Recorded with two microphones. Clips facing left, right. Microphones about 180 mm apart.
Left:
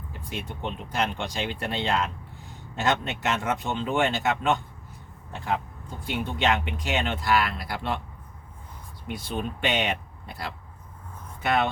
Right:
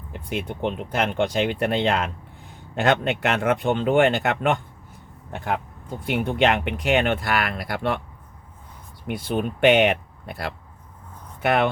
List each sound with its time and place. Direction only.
0.1 s speech: 65° right (ahead or behind)
6.1 s speech: 65° right (ahead or behind)
9.0 s speech: 60° right (ahead or behind)